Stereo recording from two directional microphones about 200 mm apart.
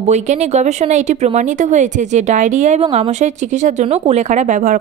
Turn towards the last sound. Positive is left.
turn(degrees=-40)  # may be behind; listen again after turning